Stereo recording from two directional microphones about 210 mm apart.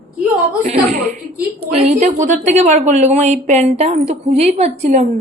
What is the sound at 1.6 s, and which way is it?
A woman's voice, 30° right (ahead or behind).